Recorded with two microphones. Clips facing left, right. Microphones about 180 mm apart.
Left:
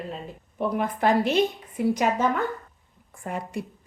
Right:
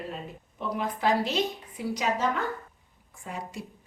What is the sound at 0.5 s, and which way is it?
A woman's voice, 55° left (ahead or behind).